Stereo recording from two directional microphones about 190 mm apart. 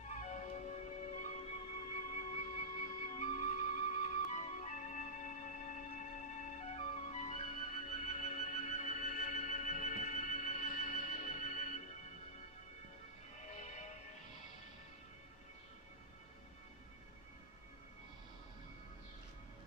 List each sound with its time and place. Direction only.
0.1 s music: 40° left (ahead or behind)
13.4 s music: 40° left (ahead or behind)